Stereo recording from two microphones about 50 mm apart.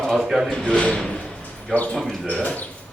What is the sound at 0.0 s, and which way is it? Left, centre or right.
Speech, centre.